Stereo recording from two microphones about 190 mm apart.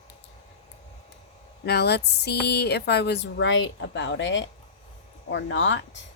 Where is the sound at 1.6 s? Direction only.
60° left (ahead or behind).